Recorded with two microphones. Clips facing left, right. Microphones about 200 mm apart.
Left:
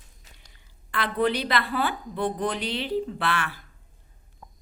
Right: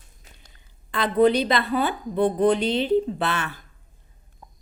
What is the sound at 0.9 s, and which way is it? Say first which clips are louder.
A woman's voice: right 6 dB; 20° right (ahead or behind).